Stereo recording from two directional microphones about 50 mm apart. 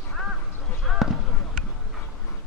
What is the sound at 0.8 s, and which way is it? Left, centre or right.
Basketball bounce, centre.